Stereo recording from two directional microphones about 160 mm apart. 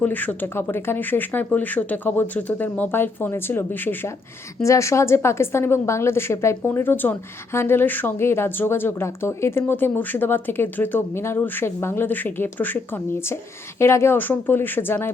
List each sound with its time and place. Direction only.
0.0 s speech: 10° left (ahead or behind)